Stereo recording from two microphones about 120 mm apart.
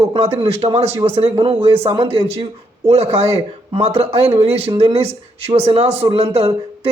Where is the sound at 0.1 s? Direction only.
55° right (ahead or behind).